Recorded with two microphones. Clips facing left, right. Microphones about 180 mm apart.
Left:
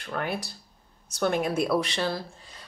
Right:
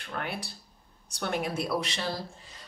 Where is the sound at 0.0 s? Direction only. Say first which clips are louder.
Left 5 dB; 45° left (ahead or behind).